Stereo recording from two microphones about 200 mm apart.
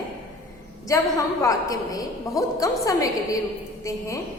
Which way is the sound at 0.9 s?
15° left (ahead or behind).